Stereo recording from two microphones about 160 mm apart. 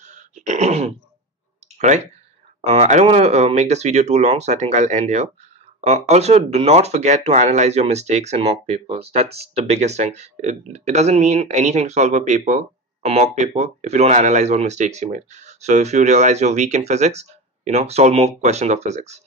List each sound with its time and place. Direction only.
0.1 s throat clearing: 50° right (ahead or behind)
1.8 s speech: 45° right (ahead or behind)